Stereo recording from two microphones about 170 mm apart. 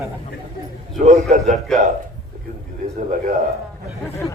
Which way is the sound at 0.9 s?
40° right (ahead or behind).